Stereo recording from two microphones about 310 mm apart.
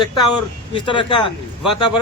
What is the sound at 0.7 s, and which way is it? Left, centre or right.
Speech, centre.